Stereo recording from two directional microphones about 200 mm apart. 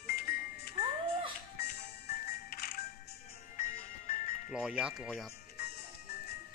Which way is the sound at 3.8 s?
35° left (ahead or behind).